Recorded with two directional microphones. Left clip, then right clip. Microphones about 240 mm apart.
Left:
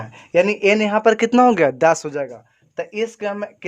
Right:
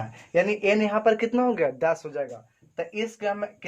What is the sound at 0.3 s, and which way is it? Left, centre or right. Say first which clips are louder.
A man's voice: left 6 dB; left.